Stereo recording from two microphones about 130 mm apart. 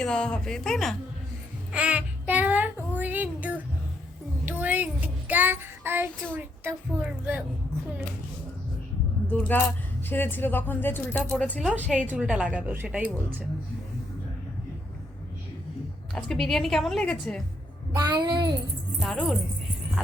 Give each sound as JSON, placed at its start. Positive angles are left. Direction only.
{"t": 0.0, "sound": "a woman's voice", "side_deg": 5}
{"t": 1.7, "sound": "child singing", "side_deg": -10}
{"t": 6.3, "sound": "a woman's voice", "side_deg": -15}
{"t": 9.3, "sound": "speech", "side_deg": 15}
{"t": 11.9, "sound": "a woman's voice", "side_deg": -10}
{"t": 16.1, "sound": "a woman's voice", "side_deg": 0}
{"t": 17.9, "sound": "a woman's voice", "side_deg": -30}
{"t": 18.9, "sound": "a woman's voice", "side_deg": 0}